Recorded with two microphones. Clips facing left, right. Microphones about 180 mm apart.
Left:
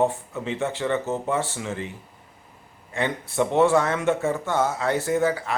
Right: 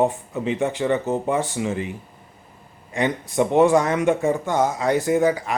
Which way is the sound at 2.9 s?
15° right (ahead or behind).